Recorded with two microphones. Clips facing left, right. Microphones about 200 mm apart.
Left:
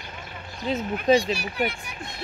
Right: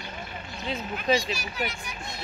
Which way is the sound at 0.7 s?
45° left (ahead or behind).